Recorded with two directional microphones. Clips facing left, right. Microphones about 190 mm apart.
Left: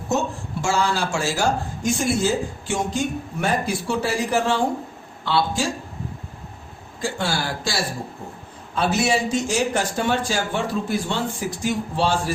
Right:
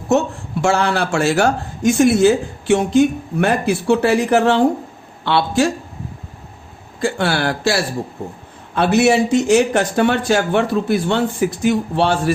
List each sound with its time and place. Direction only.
0.1 s speech: 65° right (ahead or behind)
7.0 s speech: 65° right (ahead or behind)